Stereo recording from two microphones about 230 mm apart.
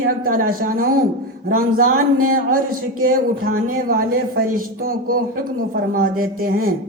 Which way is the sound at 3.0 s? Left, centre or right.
Right.